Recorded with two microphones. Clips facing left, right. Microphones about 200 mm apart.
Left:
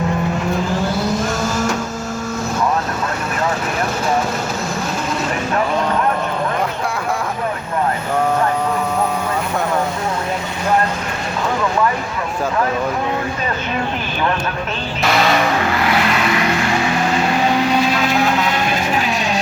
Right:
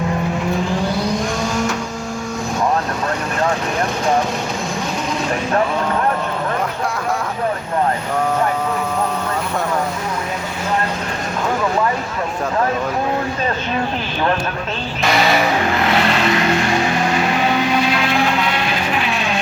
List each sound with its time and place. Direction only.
1.0 s vehicle: 5° left (ahead or behind)
15.9 s vehicle: 30° right (ahead or behind)